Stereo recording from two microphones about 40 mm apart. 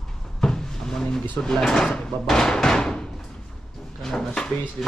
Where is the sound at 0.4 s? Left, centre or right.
Centre.